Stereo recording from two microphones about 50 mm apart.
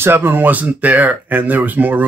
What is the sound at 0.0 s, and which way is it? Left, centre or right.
Speech, right.